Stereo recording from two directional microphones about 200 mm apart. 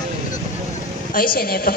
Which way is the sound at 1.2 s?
45° left (ahead or behind).